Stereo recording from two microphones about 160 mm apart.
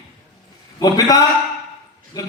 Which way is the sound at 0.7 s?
25° left (ahead or behind).